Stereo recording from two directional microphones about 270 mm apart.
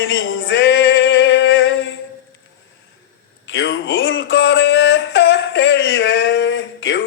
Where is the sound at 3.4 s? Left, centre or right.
Left.